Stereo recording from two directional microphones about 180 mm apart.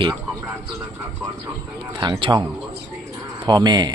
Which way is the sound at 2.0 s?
25° right (ahead or behind).